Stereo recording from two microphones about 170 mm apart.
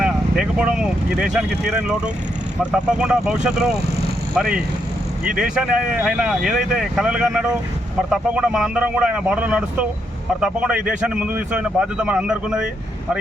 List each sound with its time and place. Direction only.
0.0 s a man's voice: 5° right (ahead or behind)